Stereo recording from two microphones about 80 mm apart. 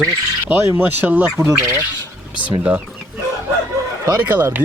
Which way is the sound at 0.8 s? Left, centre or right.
Right.